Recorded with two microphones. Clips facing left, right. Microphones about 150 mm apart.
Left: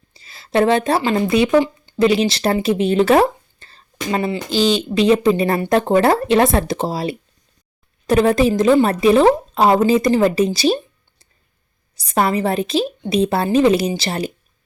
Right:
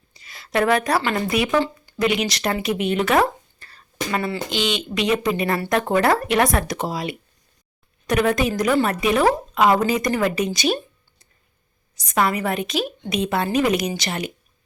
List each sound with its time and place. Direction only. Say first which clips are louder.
0.1 s a woman's voice: left 5 dB; 30° left (ahead or behind)
11.9 s a woman's voice: left 3 dB; 35° left (ahead or behind)